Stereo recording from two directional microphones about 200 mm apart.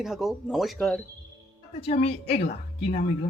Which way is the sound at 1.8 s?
30° left (ahead or behind).